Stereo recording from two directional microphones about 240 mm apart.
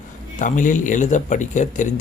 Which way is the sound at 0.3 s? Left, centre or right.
Left.